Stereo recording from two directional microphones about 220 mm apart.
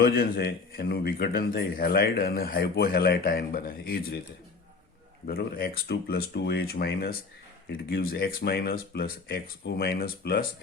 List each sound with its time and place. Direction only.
0.0 s a man's voice: 45° left (ahead or behind)
5.2 s a man's voice: 45° left (ahead or behind)